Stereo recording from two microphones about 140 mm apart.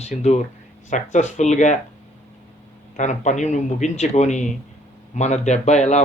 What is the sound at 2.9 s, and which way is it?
A man's voice, 60° left (ahead or behind).